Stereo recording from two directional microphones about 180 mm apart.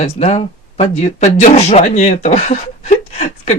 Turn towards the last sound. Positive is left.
turn(degrees=40)  # may be behind; listen again after turning